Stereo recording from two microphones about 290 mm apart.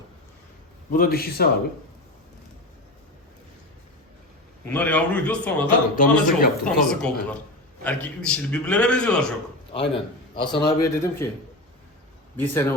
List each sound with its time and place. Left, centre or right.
0.9 s a man's voice: left
4.7 s a man's voice: centre
6.0 s a man's voice: left
6.7 s a man's voice: centre
9.7 s a man's voice: centre
12.4 s speech: centre